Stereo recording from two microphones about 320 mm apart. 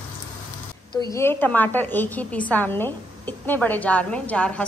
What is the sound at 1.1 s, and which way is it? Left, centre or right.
A woman's voice, centre.